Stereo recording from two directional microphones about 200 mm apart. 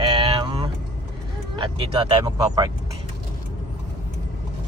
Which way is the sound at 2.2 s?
20° right (ahead or behind).